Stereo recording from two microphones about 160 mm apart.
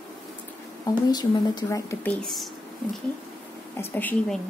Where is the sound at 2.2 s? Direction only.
Centre (ahead or behind).